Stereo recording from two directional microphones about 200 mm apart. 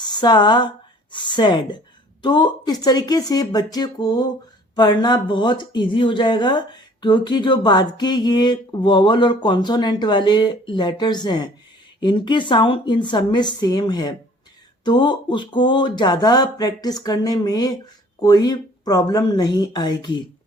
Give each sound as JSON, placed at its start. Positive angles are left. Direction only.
{"t": 0.0, "sound": "a woman's voice", "side_deg": 20}